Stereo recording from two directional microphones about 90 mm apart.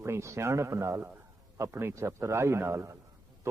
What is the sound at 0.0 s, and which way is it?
A man's voice, 30° right (ahead or behind).